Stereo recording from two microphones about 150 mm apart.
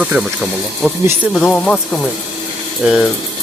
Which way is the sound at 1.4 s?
10° left (ahead or behind).